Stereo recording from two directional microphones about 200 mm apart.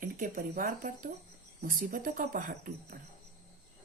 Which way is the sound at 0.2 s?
45° right (ahead or behind).